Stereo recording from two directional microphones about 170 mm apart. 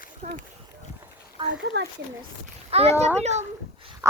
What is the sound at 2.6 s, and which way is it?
Speech, 35° right (ahead or behind).